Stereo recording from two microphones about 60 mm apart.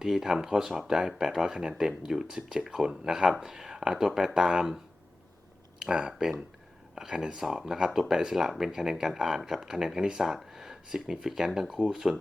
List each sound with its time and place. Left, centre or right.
0.0 s speech: centre
5.8 s speech: centre